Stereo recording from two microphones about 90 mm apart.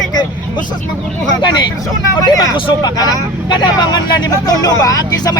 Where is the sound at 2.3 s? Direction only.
45° left (ahead or behind).